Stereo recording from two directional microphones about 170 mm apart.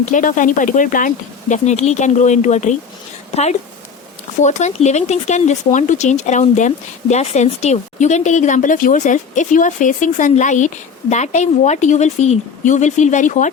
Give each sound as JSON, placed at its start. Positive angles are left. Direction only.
{"t": 0.0, "sound": "speech", "side_deg": 50}